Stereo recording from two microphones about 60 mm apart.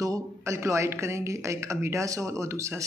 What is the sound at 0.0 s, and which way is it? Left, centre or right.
Speech, right.